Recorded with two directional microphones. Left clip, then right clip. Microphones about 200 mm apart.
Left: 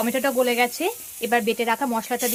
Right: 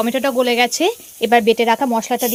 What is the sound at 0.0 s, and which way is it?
Speech, 35° right (ahead or behind).